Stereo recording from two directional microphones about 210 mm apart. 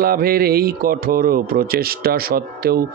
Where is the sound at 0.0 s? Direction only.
45° right (ahead or behind).